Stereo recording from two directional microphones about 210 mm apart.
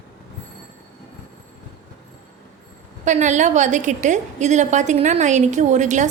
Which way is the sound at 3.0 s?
35° right (ahead or behind).